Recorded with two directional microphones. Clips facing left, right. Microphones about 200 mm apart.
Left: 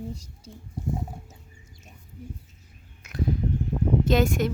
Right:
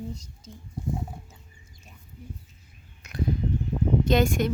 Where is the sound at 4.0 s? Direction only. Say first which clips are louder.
Even; 5° left (ahead or behind).